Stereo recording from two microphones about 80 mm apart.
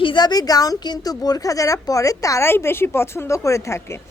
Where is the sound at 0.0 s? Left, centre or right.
Left.